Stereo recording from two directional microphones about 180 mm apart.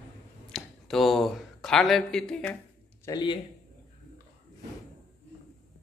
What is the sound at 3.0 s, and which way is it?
Speech, 25° left (ahead or behind).